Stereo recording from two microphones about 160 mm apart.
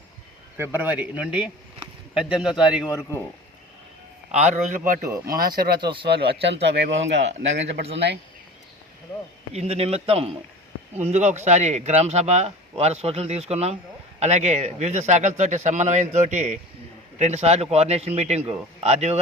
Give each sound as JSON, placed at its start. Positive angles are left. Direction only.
{"t": 0.5, "sound": "a man's voice", "side_deg": -15}
{"t": 4.3, "sound": "speech", "side_deg": -10}
{"t": 5.3, "sound": "speech", "side_deg": -70}
{"t": 5.8, "sound": "speech", "side_deg": -30}
{"t": 6.1, "sound": "speech", "side_deg": -90}
{"t": 9.5, "sound": "speech", "side_deg": -40}